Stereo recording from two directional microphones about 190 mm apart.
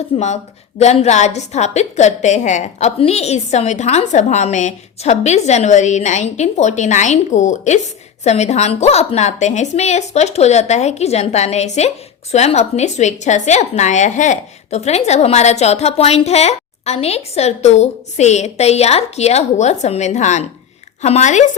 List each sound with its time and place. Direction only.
0.1 s a woman's voice: 30° left (ahead or behind)